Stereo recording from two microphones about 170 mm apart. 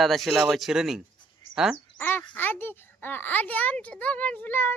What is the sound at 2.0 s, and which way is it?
A child's voice, 10° left (ahead or behind).